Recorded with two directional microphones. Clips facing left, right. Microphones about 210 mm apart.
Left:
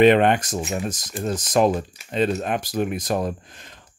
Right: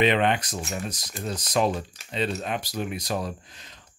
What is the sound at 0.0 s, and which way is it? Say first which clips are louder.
Speech: left 7 dB; 50° left (ahead or behind).